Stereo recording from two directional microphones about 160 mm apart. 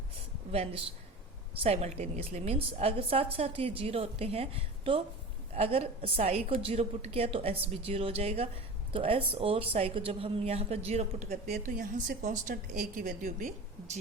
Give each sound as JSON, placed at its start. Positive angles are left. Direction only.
{"t": 0.5, "sound": "a woman's voice", "side_deg": -40}
{"t": 11.5, "sound": "a woman's voice", "side_deg": -55}